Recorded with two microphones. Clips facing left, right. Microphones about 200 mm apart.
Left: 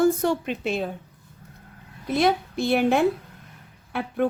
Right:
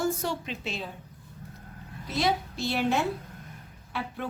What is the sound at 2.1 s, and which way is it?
Speech, 55° left (ahead or behind).